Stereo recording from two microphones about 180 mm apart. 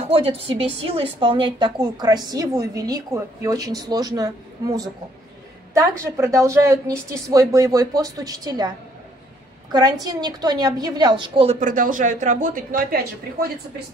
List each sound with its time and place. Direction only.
0.1 s a woman's voice: 30° right (ahead or behind)
11.6 s speech: 45° right (ahead or behind)